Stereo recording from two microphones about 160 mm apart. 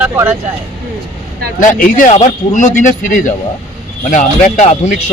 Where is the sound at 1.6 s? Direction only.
55° left (ahead or behind).